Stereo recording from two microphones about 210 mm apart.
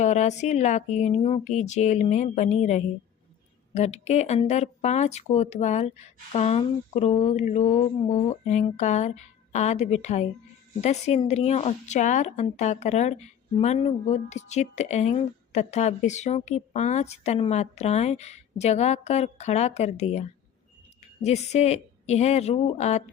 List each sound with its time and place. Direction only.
0.0 s a woman's voice: 35° left (ahead or behind)